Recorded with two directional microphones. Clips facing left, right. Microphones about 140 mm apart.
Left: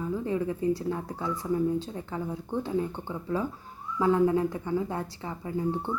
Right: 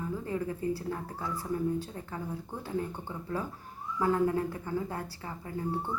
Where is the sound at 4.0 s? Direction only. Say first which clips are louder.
Left 4 dB; 20° left (ahead or behind).